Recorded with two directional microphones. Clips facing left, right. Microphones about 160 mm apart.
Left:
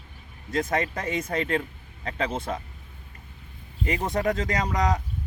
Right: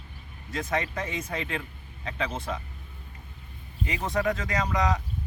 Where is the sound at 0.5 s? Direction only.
45° left (ahead or behind).